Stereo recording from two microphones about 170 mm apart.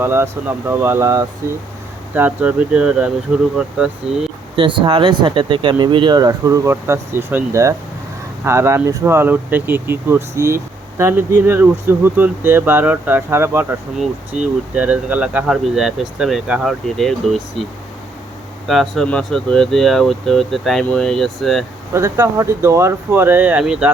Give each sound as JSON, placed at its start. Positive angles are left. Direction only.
{"t": 0.0, "sound": "speech", "side_deg": -15}
{"t": 4.5, "sound": "speech", "side_deg": -30}
{"t": 14.8, "sound": "speech", "side_deg": -5}
{"t": 18.7, "sound": "speech", "side_deg": 0}
{"t": 21.9, "sound": "speech", "side_deg": -15}